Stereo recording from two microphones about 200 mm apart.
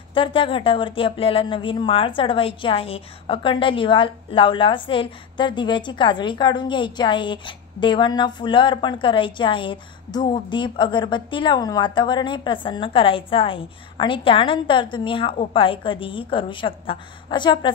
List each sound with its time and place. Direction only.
0.1 s speech: 25° left (ahead or behind)